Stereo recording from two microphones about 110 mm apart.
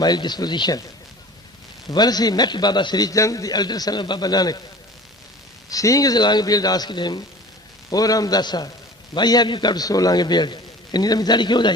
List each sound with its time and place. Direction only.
0.0 s a man's voice: 40° left (ahead or behind)
1.9 s a man's voice: 40° left (ahead or behind)
5.6 s a man's voice: 30° left (ahead or behind)